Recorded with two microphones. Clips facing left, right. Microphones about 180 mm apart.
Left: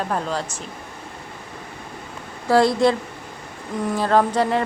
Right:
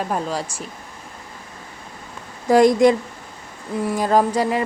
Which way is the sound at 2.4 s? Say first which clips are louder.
Right 3 dB; 15° right (ahead or behind).